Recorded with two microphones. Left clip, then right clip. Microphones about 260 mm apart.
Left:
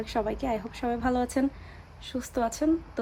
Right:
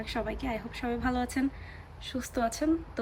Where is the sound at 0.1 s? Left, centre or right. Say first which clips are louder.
Left 5 dB; centre.